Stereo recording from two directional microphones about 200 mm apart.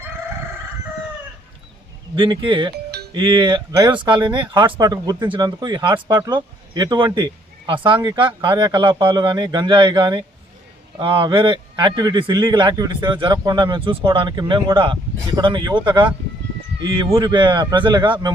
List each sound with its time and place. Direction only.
2.1 s a man's voice: 25° right (ahead or behind)